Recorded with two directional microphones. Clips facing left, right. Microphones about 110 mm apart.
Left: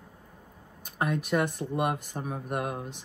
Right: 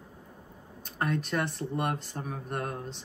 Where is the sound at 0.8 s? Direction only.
10° left (ahead or behind).